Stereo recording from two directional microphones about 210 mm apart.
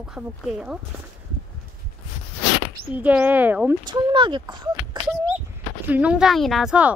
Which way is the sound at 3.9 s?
20° right (ahead or behind).